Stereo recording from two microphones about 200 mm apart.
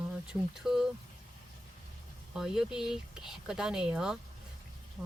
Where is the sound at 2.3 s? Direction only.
5° right (ahead or behind).